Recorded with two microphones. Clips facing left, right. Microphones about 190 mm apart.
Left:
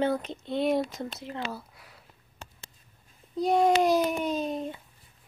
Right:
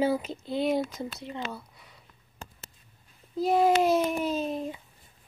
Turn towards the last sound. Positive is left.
turn(degrees=0)  # may be behind; listen again after turning